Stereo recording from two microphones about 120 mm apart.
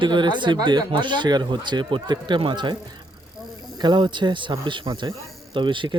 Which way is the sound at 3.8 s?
40° right (ahead or behind).